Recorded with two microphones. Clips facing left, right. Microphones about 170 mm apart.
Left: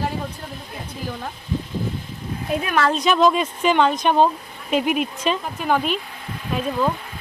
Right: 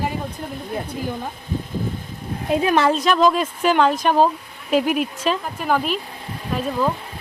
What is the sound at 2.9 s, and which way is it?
Speech, centre (ahead or behind).